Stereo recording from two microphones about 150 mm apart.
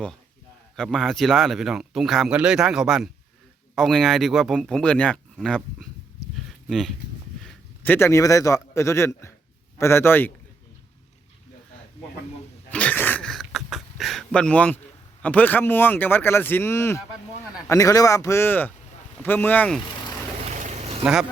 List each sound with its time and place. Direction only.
0.8 s speech: centre (ahead or behind)
6.3 s a sound: centre (ahead or behind)
7.4 s a man's voice: 10° left (ahead or behind)
12.7 s a man's voice: 10° left (ahead or behind)
20.5 s a sound: 55° right (ahead or behind)
21.0 s speech: 5° right (ahead or behind)